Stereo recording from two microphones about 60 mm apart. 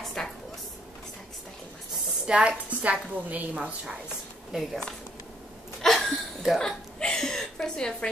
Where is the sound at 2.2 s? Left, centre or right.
Right.